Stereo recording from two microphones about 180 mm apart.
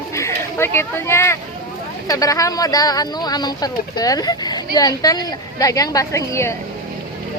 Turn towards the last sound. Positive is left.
turn(degrees=15)  # may be behind; listen again after turning